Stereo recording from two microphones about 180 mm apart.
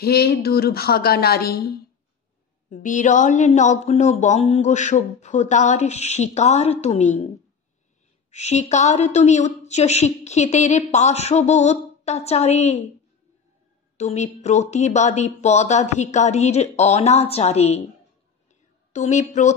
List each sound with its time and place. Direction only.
0.0 s a woman's voice: 60° left (ahead or behind)
2.7 s speech: 45° left (ahead or behind)
8.3 s speech: 40° left (ahead or behind)
13.9 s speech: 40° left (ahead or behind)
18.9 s speech: 40° left (ahead or behind)